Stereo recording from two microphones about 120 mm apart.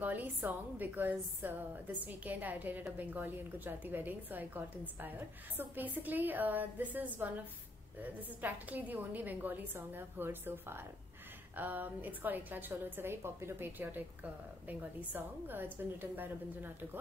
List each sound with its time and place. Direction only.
0.0 s a woman's voice: 15° right (ahead or behind)